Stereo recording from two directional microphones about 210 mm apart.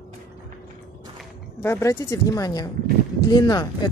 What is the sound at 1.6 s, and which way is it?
Speech, 15° left (ahead or behind).